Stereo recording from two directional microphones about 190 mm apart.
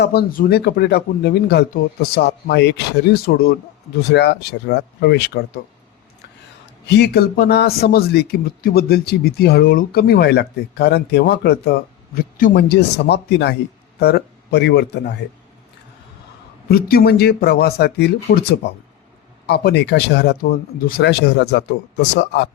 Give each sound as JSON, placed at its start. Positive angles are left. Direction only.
{"t": 0.0, "sound": "a man's voice", "side_deg": 55}
{"t": 4.1, "sound": "a man's voice", "side_deg": 65}
{"t": 6.8, "sound": "a man's voice", "side_deg": 60}
{"t": 16.6, "sound": "a man's voice", "side_deg": 50}